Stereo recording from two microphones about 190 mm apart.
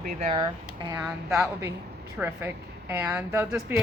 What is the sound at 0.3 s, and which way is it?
Speech, 25° right (ahead or behind).